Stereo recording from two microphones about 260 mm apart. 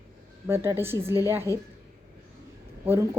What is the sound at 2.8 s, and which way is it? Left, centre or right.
Speech, centre.